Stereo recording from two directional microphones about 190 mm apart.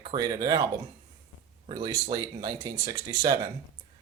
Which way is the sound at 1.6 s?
30° right (ahead or behind).